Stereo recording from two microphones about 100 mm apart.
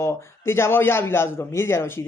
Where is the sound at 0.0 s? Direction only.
25° left (ahead or behind).